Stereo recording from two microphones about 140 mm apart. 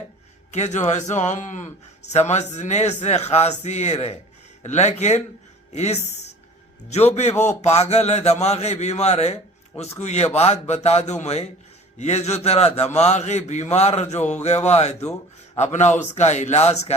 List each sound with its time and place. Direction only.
0.5 s a man's voice: 55° left (ahead or behind)
7.3 s speech: 15° left (ahead or behind)
7.6 s a man's voice: 50° left (ahead or behind)